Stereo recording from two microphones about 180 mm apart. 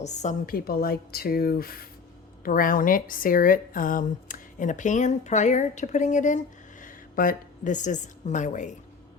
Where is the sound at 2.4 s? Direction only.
50° left (ahead or behind).